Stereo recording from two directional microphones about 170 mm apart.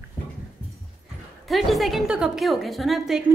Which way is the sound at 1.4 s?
Centre (ahead or behind).